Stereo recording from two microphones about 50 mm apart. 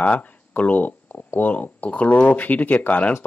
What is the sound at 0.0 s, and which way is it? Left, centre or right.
Speech, left.